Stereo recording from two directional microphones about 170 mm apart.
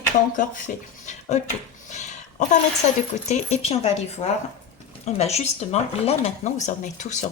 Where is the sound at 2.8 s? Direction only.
50° left (ahead or behind).